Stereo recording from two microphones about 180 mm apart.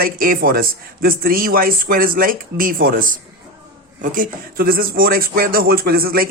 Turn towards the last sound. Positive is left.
turn(degrees=-55)  # may be behind; listen again after turning